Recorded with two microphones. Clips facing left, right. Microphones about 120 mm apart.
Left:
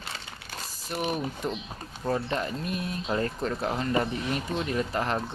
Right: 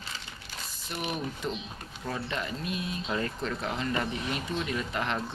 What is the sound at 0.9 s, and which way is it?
Speech, 40° left (ahead or behind).